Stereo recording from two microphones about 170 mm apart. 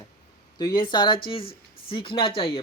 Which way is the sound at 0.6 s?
25° left (ahead or behind).